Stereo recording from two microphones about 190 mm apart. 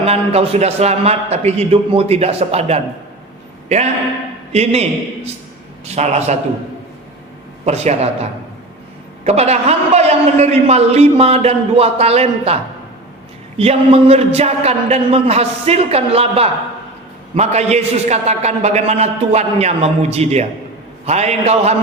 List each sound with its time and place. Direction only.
0.0 s a man's voice: 30° right (ahead or behind)
4.5 s a man's voice: 35° right (ahead or behind)
7.6 s a man's voice: 35° right (ahead or behind)
13.6 s a man's voice: 30° right (ahead or behind)